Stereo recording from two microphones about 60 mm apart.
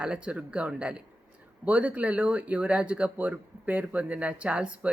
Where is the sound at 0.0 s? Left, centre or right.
Centre.